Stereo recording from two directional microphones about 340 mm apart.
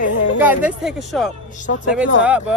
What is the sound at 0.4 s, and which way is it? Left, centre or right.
Speech, centre.